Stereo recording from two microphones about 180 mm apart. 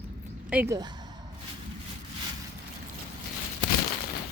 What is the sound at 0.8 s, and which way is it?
Speech, 25° right (ahead or behind).